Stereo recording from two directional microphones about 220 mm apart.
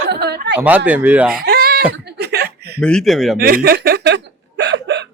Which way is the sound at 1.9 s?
50° right (ahead or behind).